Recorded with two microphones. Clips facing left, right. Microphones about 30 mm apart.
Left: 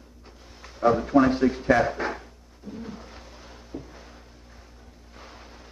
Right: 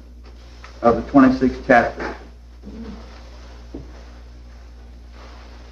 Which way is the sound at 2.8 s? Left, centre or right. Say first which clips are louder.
Right 4 dB; right.